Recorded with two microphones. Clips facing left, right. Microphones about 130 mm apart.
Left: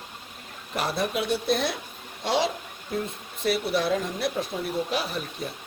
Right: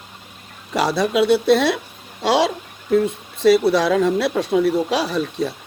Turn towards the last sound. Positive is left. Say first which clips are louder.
# right 10 dB
turn(degrees=-90)